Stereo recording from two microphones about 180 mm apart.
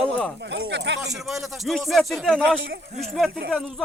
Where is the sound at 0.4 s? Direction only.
85° right.